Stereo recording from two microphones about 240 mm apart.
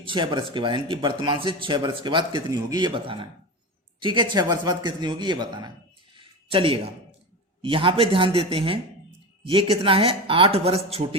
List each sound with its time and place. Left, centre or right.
0.0 s a man's voice: right
6.1 s a sound: right
7.6 s speech: right